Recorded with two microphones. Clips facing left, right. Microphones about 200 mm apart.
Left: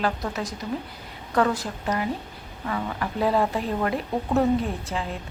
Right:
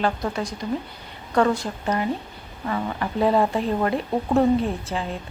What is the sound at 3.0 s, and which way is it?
Speech, 25° right (ahead or behind).